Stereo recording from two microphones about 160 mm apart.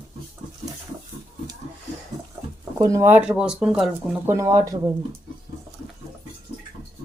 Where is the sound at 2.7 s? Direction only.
20° right (ahead or behind); by 3.9 s 5° right (ahead or behind).